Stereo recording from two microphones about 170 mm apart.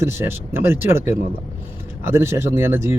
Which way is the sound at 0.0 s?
15° right (ahead or behind).